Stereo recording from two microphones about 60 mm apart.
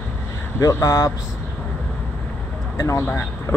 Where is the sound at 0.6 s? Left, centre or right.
Left.